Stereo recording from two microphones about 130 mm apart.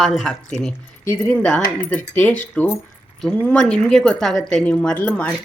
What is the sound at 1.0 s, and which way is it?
Speech, 15° left (ahead or behind).